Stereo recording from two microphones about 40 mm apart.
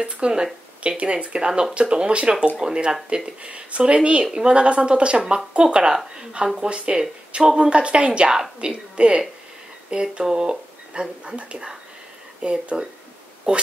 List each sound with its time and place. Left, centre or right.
0.0 s speech: centre